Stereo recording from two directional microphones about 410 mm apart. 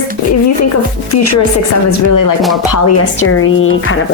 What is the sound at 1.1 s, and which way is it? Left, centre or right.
Speech, left.